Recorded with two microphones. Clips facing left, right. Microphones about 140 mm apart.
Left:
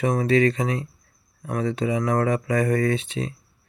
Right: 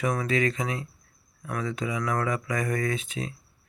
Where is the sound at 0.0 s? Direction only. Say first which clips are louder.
Left 6 dB; 30° left (ahead or behind).